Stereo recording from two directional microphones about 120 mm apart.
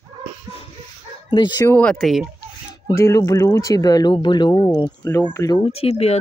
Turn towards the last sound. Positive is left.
turn(degrees=60)  # may be behind; listen again after turning